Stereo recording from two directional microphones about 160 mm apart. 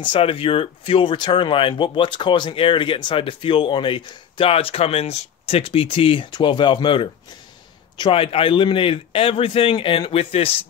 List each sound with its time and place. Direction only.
0.0 s speech: 35° left (ahead or behind)